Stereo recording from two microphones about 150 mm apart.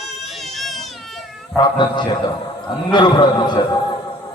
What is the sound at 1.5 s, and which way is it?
Speech, 30° left (ahead or behind).